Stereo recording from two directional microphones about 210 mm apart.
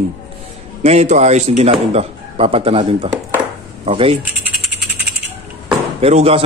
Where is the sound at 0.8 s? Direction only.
30° right (ahead or behind).